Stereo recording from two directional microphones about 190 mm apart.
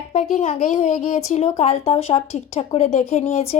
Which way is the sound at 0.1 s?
40° left (ahead or behind).